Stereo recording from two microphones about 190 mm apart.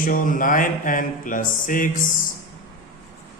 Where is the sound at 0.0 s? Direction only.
45° left (ahead or behind).